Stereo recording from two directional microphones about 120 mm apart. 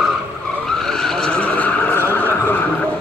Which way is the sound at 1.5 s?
15° left (ahead or behind).